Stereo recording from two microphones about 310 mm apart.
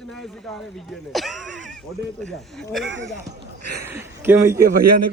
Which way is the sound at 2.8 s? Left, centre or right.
Right.